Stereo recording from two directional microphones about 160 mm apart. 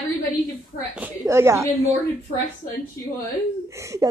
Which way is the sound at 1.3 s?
15° right (ahead or behind).